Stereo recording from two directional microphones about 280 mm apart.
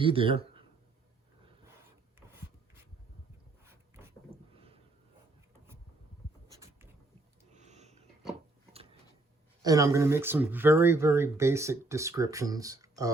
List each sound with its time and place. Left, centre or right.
0.0 s speech: centre
7.6 s a sound: right
9.6 s speech: centre